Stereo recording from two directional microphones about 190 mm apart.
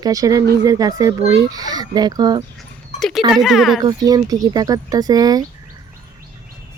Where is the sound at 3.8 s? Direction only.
20° right (ahead or behind).